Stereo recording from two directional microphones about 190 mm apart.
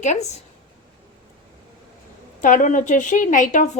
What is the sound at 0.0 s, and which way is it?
Speech, 35° left (ahead or behind).